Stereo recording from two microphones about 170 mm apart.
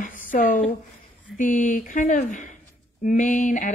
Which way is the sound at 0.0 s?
50° left (ahead or behind).